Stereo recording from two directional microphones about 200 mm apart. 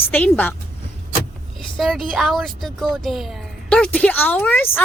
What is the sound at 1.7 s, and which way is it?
A woman's voice, centre (ahead or behind).